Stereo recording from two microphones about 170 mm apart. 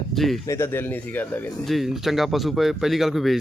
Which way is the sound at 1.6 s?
Centre (ahead or behind).